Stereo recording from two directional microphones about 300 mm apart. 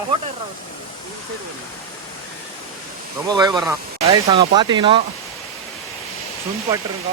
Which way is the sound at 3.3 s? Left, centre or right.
Centre.